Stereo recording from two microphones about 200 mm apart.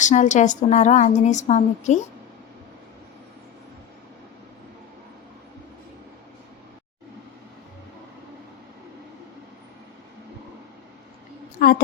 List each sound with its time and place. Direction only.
0.0 s a woman's voice: 35° left (ahead or behind)